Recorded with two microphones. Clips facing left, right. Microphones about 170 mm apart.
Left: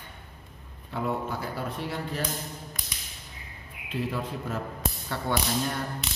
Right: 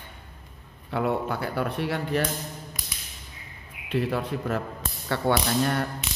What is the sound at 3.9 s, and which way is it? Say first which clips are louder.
Speech: right 5 dB; 70° right (ahead or behind).